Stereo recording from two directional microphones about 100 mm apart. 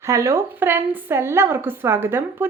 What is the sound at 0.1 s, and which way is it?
Speech, 30° right (ahead or behind).